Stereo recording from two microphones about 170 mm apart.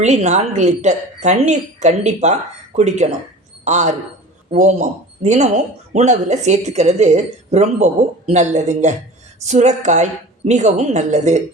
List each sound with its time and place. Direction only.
0.0 s a man's voice: 40° right (ahead or behind)